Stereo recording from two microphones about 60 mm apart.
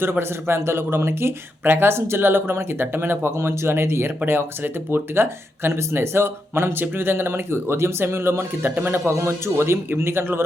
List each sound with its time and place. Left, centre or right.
0.0 s speech: right